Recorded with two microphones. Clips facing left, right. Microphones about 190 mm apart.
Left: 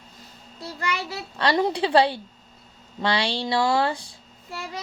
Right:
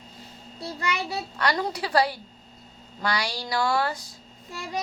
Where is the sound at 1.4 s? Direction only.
25° left (ahead or behind).